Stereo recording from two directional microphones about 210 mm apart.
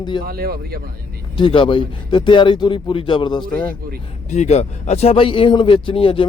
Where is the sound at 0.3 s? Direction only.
45° right (ahead or behind).